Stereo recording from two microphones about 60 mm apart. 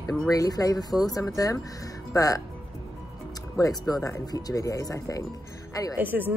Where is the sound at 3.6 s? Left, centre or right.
Left.